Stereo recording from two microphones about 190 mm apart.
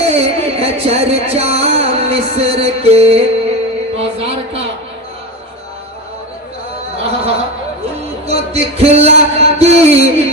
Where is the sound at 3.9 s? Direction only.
30° right (ahead or behind).